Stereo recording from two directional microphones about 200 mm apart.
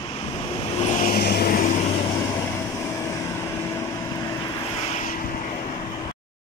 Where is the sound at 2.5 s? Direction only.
15° left (ahead or behind).